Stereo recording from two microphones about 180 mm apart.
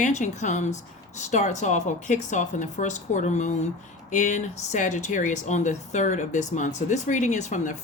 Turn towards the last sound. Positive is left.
turn(degrees=40)  # may be behind; listen again after turning